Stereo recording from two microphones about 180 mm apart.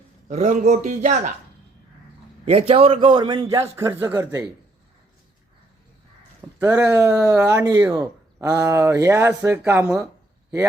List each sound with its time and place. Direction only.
0.3 s a man's voice: 45° right (ahead or behind)
2.4 s a man's voice: 35° right (ahead or behind); by 4.4 s 15° right (ahead or behind)
6.6 s speech: 15° right (ahead or behind)